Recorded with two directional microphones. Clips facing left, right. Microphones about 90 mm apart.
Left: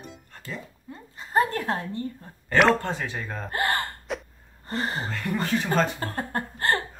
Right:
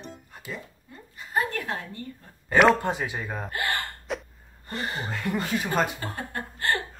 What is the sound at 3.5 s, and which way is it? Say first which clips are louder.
Speech: left 5 dB; 35° left (ahead or behind).